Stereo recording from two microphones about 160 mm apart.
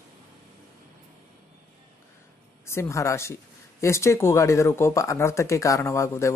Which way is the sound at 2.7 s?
15° left (ahead or behind).